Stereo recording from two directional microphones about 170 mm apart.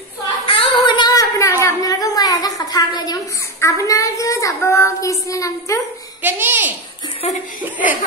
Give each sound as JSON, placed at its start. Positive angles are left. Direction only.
{"t": 0.5, "sound": "a sound", "side_deg": 30}
{"t": 3.6, "sound": "speech", "side_deg": 20}
{"t": 6.2, "sound": "a child's voice", "side_deg": -10}